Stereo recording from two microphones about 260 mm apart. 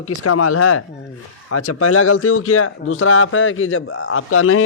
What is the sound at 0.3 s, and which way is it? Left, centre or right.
Speech, left.